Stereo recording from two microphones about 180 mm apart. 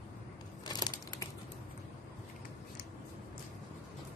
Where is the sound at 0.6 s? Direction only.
20° left (ahead or behind).